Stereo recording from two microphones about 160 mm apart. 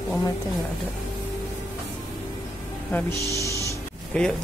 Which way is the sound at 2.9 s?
15° left (ahead or behind).